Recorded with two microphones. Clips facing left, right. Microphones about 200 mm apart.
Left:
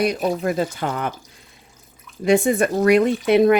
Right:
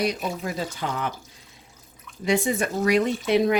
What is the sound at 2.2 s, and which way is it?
A woman's voice, 55° left (ahead or behind).